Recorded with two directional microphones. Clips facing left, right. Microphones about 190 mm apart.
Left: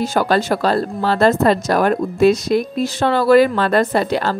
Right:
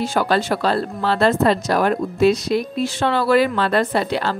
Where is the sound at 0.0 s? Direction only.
45° left (ahead or behind).